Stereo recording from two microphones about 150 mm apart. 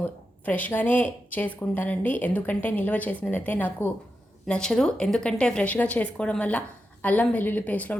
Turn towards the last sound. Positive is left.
turn(degrees=10)  # may be behind; listen again after turning